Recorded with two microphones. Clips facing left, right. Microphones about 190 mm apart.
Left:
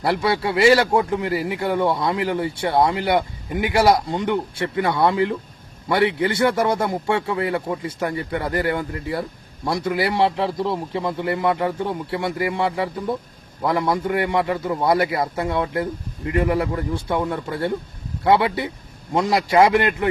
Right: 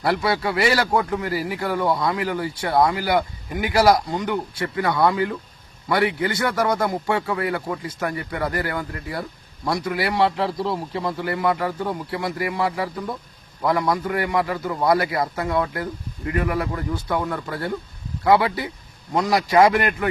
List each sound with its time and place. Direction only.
0.0 s a man's voice: 25° left (ahead or behind)